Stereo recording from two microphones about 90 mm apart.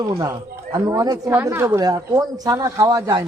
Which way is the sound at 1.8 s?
45° right (ahead or behind).